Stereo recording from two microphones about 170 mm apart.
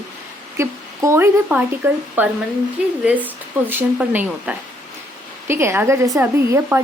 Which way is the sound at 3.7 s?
10° right (ahead or behind).